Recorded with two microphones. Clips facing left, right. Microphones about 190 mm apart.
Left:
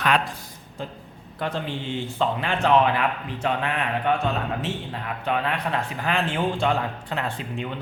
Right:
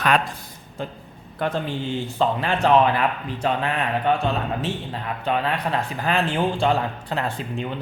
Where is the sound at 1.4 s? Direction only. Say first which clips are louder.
Right 3 dB; 50° right (ahead or behind).